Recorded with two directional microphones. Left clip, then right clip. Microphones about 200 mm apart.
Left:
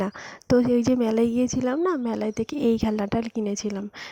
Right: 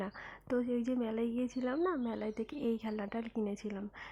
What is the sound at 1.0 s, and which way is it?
Speech, 60° left (ahead or behind).